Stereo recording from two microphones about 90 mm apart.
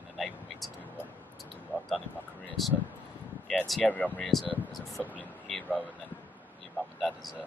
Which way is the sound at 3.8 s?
15° left (ahead or behind).